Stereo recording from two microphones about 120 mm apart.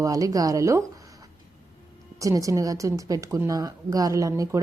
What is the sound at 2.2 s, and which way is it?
A woman's voice, 30° right (ahead or behind).